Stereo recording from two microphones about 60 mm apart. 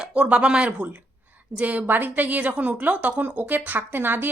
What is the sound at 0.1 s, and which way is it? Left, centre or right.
A woman's voice, centre.